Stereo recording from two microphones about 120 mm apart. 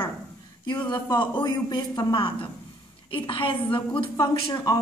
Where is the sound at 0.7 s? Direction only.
35° left (ahead or behind).